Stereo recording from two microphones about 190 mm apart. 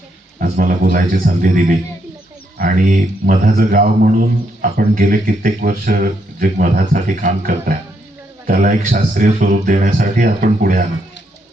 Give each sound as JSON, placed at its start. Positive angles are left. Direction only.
{"t": 0.3, "sound": "speech", "side_deg": -45}